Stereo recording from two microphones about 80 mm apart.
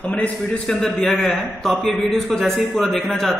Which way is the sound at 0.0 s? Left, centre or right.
Centre.